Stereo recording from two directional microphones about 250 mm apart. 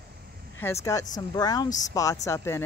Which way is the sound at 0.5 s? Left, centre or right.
Centre.